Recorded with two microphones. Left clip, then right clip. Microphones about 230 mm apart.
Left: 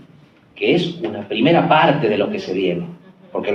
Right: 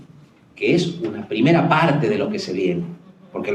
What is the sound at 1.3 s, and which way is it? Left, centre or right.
Speech, right.